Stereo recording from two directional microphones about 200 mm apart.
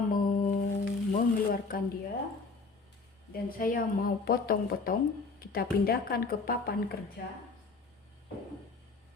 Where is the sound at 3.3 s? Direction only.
45° left (ahead or behind).